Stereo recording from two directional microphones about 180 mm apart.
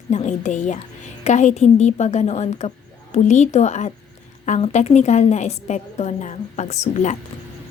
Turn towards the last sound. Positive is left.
turn(degrees=40)  # may be behind; listen again after turning